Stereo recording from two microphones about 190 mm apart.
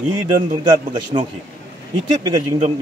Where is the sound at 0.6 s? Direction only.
25° right (ahead or behind).